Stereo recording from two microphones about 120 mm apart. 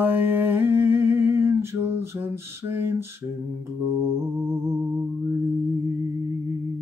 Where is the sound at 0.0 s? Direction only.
15° right (ahead or behind).